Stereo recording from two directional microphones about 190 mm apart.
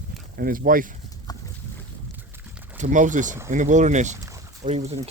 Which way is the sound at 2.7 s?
40° right (ahead or behind).